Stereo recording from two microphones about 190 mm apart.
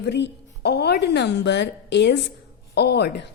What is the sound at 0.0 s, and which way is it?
A woman's voice, 65° left (ahead or behind).